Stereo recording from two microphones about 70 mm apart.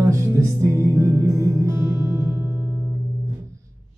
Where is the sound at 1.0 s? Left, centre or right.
Right.